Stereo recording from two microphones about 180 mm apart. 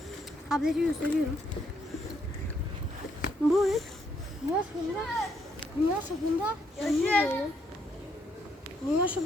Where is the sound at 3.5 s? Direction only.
Centre (ahead or behind).